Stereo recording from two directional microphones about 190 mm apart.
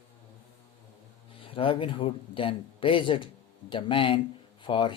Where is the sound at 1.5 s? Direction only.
30° left (ahead or behind).